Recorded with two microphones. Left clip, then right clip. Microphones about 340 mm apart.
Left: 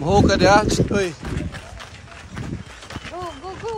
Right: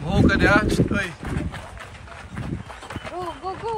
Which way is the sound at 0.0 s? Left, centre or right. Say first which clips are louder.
Left 4 dB; centre.